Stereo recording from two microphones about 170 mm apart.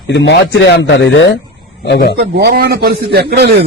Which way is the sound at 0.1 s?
90° left.